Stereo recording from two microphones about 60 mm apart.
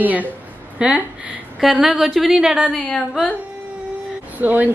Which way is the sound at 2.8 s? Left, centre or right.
Centre.